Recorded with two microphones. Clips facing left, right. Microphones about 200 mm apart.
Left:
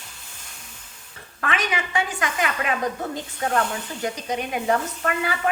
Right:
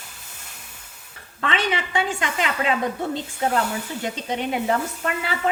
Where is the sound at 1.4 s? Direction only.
30° right (ahead or behind).